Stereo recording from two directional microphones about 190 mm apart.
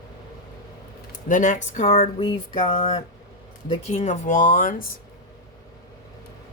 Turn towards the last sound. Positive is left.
turn(degrees=45)  # may be behind; listen again after turning